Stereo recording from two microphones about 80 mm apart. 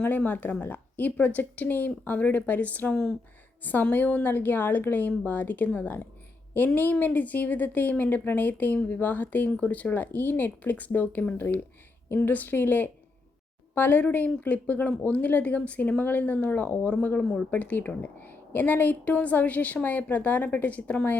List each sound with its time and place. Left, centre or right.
0.0 s a woman's voice: left